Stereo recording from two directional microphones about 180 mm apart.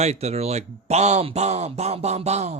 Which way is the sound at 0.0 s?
35° right (ahead or behind).